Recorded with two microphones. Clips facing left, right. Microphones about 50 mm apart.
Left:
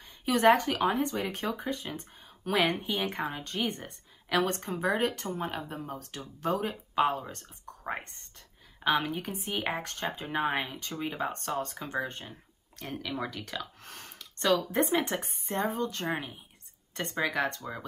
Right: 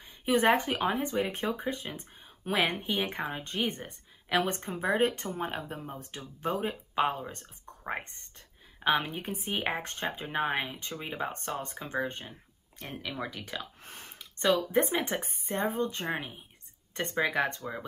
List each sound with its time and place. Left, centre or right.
0.2 s speech: right
4.3 s speech: centre
8.8 s speech: right
10.2 s speech: centre
11.0 s speech: centre
11.6 s speech: right
12.3 s a sound: centre
13.0 s speech: centre
13.8 s a sound: centre
14.8 s speech: centre
15.0 s speech: right
17.6 s speech: centre